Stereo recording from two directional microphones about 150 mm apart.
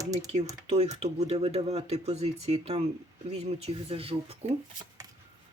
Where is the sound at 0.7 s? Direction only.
45° right (ahead or behind).